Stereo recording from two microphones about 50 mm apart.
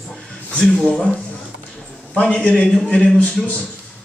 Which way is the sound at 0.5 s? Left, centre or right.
Left.